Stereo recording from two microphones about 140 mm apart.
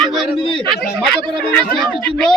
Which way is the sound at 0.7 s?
Centre (ahead or behind).